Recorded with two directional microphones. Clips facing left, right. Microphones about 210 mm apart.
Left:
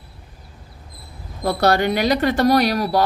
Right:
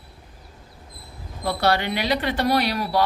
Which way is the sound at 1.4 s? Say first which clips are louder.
Left 5 dB; 45° left (ahead or behind).